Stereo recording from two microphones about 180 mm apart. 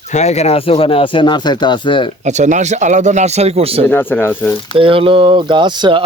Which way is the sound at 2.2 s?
40° right (ahead or behind).